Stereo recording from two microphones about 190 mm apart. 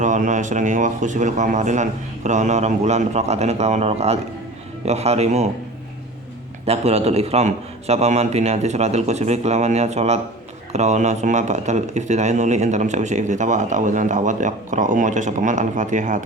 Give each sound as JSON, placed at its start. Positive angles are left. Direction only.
{"t": 0.0, "sound": "speech", "side_deg": -40}
{"t": 6.7, "sound": "speech", "side_deg": -35}